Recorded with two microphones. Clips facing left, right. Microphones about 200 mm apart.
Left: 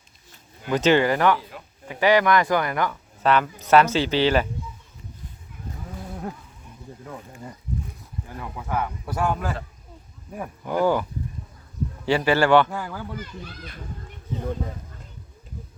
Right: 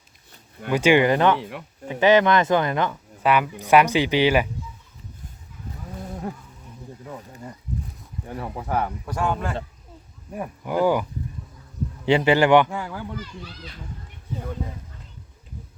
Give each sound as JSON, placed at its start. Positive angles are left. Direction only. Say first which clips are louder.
{"t": 0.7, "sound": "speech", "louder": "right 1 dB", "side_deg": -10}
{"t": 1.4, "sound": "speech", "louder": "right 7 dB", "side_deg": -70}
{"t": 1.9, "sound": "speech", "louder": "right 2 dB", "side_deg": -20}
{"t": 8.4, "sound": "speech", "louder": "right 2 dB", "side_deg": -30}
{"t": 9.0, "sound": "speech", "louder": "even", "side_deg": 5}
{"t": 10.3, "sound": "speech", "louder": "right 1 dB", "side_deg": -10}
{"t": 12.0, "sound": "speech", "louder": "right 2 dB", "side_deg": -20}
{"t": 12.7, "sound": "speech", "louder": "right 1 dB", "side_deg": 0}
{"t": 13.1, "sound": "a child's voice", "louder": "even", "side_deg": 50}